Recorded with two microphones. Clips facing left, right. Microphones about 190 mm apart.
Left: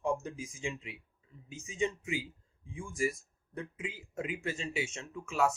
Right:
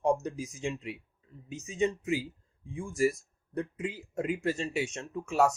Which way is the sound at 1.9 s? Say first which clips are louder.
Right 6 dB; 40° right (ahead or behind).